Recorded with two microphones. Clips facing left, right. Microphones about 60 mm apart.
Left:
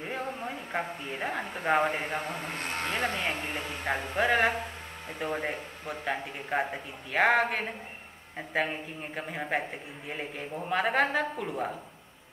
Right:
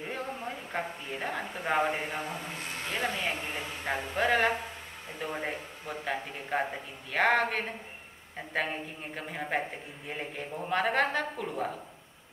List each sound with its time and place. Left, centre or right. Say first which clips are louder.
0.0 s speech: left 2 dB; centre
2.2 s speech: left 3 dB; left
3.2 s a man's voice: left 1 dB; centre